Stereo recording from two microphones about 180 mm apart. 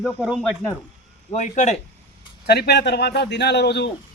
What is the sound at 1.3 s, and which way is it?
Speech, 40° left (ahead or behind).